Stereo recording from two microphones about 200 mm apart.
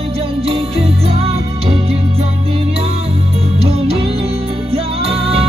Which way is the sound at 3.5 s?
30° right (ahead or behind).